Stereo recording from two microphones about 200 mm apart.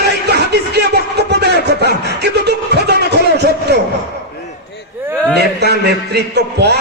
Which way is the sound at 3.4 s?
55° right (ahead or behind).